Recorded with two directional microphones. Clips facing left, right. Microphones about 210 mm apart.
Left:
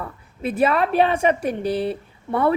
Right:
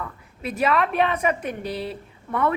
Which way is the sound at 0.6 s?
30° left (ahead or behind).